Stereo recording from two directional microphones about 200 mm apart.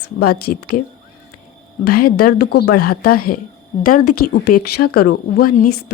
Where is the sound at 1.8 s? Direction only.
50° left (ahead or behind).